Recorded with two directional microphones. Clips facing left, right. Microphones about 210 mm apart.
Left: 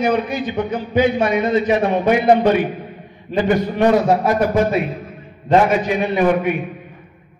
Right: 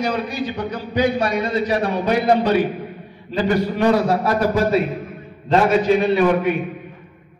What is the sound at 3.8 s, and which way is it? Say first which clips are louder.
Mantra: left 3 dB; 20° left (ahead or behind).